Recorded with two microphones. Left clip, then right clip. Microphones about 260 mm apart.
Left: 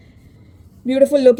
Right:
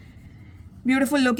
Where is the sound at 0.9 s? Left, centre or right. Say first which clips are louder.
Left 10 dB; right.